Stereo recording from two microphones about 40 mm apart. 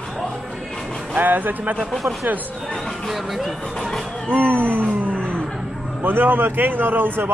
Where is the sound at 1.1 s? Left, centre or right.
Right.